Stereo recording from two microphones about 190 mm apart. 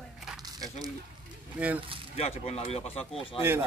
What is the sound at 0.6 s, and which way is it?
Speech, 20° right (ahead or behind).